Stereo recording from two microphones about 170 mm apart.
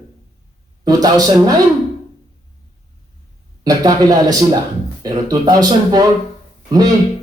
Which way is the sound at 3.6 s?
20° right (ahead or behind).